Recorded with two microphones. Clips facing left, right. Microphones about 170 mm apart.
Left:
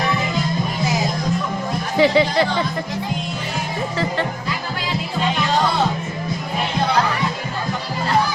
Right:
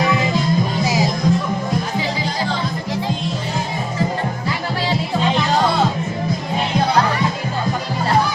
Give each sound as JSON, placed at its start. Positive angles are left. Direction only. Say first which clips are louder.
{"t": 2.0, "sound": "music", "louder": "left 7 dB", "side_deg": 70}